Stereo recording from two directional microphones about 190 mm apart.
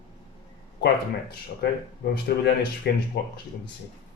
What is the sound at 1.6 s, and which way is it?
Speech, 60° left (ahead or behind).